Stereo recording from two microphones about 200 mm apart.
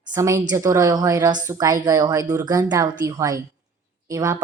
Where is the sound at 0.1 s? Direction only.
15° right (ahead or behind).